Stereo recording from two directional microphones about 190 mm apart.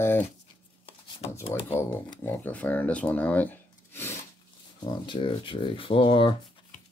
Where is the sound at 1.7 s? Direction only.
15° left (ahead or behind).